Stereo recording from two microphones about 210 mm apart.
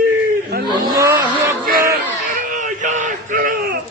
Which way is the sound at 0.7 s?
15° right (ahead or behind).